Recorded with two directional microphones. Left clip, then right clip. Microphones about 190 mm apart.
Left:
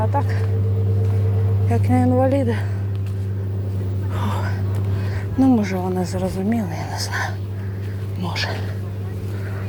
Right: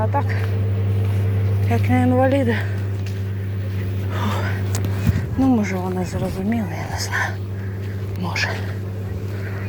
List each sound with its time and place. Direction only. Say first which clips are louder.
0.0 s a woman's voice: right 1 dB; 5° left (ahead or behind)
1.7 s a woman's voice: even; 10° left (ahead or behind)
2.1 s speech: right 1 dB; centre (ahead or behind)
4.1 s a sound: right 2 dB; centre (ahead or behind)
5.4 s a woman's voice: left 2 dB; 20° left (ahead or behind)